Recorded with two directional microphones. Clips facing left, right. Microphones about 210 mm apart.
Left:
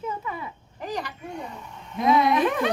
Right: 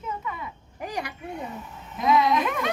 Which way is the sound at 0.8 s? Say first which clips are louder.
Left 1 dB; 10° right (ahead or behind).